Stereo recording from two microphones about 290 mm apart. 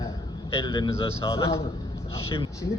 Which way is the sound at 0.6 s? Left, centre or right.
Centre.